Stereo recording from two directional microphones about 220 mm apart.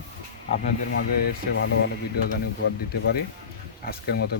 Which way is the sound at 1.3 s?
55° left (ahead or behind).